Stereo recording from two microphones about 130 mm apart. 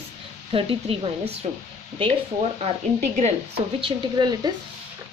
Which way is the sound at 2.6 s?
60° right (ahead or behind).